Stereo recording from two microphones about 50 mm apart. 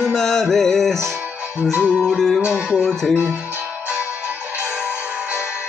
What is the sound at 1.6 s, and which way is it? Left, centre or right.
Speech, right.